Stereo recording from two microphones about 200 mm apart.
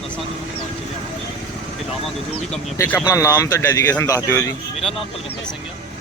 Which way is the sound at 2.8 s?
10° left (ahead or behind).